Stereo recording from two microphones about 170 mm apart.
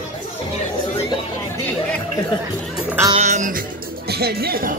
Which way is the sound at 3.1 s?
45° right (ahead or behind).